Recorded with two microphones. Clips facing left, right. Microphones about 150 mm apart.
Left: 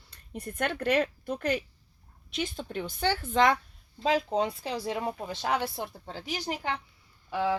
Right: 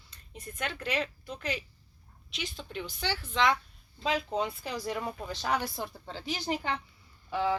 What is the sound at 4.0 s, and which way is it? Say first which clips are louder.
Speech: left 4 dB; 40° left (ahead or behind).